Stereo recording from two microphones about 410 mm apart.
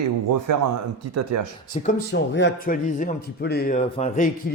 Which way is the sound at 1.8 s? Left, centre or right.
Left.